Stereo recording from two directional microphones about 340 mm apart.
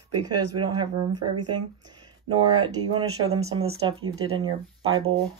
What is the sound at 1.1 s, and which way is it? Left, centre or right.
Speech, right.